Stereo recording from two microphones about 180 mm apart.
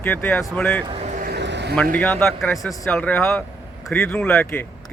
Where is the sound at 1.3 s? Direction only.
75° right (ahead or behind).